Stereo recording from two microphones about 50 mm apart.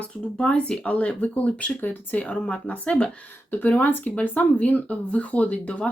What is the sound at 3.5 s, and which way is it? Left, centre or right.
Speech, left.